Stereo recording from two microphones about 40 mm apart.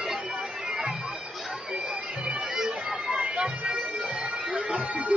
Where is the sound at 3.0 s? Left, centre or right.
Right.